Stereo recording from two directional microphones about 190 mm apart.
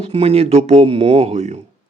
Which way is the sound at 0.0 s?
30° right (ahead or behind).